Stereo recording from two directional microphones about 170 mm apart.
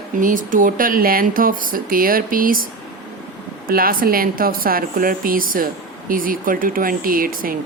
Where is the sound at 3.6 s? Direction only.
60° right (ahead or behind).